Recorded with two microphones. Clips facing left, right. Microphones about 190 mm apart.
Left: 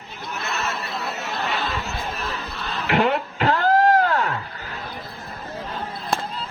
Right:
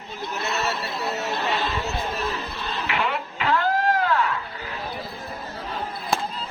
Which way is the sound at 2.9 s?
45° left (ahead or behind).